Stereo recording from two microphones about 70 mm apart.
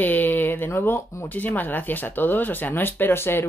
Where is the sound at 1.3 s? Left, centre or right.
Left.